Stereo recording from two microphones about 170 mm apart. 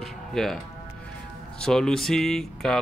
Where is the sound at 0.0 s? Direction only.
Centre (ahead or behind).